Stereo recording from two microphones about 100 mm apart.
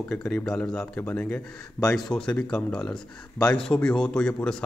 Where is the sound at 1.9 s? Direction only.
Centre (ahead or behind).